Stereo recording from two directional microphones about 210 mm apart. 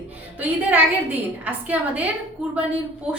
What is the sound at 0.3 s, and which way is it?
A woman's voice, 10° right (ahead or behind).